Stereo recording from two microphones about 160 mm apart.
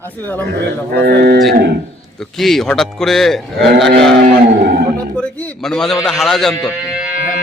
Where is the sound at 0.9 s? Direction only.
90° right.